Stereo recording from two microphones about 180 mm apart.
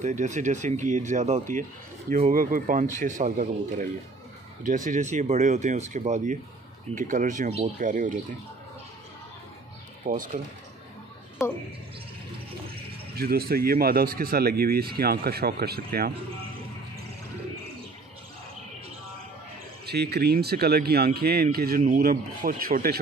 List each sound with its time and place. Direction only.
0.0 s speech: 40° right (ahead or behind)
10.0 s speech: 50° right (ahead or behind)
12.6 s speech: 60° right (ahead or behind)
19.9 s speech: 65° right (ahead or behind)